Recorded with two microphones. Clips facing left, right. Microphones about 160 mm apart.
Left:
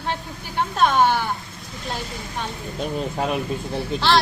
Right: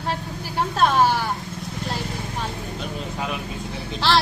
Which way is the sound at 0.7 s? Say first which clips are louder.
Left 1 dB; centre (ahead or behind).